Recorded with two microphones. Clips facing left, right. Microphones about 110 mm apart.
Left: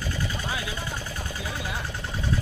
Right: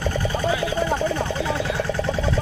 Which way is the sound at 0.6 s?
65° right (ahead or behind).